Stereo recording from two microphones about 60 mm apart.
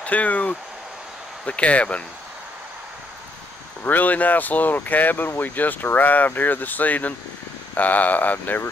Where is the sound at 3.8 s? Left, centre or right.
Left.